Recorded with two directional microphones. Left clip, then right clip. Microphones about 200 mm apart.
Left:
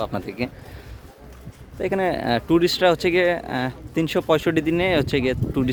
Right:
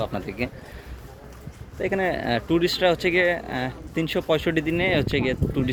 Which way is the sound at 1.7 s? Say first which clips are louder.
Left 2 dB; 25° left (ahead or behind).